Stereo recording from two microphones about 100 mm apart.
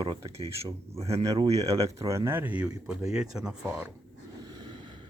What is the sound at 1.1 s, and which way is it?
Speech, 35° right (ahead or behind).